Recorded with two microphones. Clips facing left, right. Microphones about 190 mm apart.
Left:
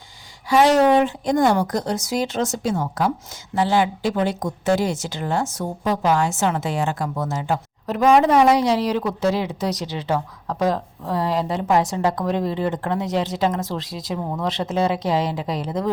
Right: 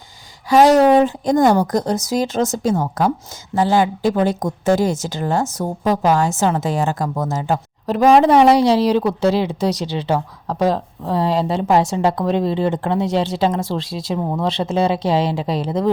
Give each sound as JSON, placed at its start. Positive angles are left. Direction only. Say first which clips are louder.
{"t": 0.5, "sound": "a woman's voice", "louder": "right 4 dB", "side_deg": -40}